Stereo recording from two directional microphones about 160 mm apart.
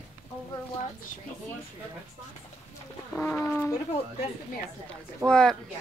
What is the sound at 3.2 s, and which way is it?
Speech, 15° left (ahead or behind).